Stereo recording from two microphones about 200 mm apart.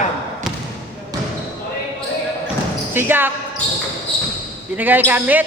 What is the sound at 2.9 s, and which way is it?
Speech, 10° right (ahead or behind).